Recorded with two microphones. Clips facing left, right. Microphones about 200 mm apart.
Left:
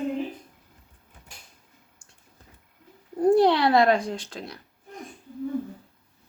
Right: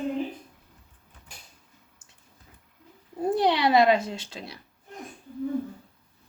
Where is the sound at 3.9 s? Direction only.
5° right (ahead or behind).